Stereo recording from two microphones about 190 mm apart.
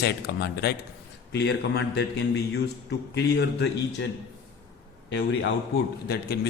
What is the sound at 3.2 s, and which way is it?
Speech, 65° left (ahead or behind).